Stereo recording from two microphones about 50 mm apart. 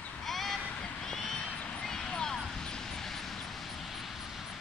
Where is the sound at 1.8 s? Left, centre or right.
Centre.